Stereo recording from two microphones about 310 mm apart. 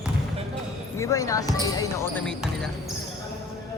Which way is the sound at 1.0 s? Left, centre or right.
Centre.